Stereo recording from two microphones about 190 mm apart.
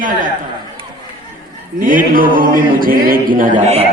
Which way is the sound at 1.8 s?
45° right (ahead or behind).